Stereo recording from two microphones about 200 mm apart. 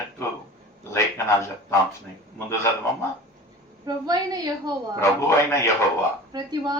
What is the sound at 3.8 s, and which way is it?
Speech, 20° right (ahead or behind).